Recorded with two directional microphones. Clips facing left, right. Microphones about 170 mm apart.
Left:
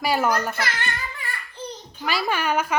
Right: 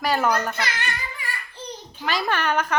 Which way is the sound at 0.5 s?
20° right (ahead or behind).